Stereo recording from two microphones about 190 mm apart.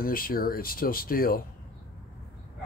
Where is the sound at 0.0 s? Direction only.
50° left (ahead or behind).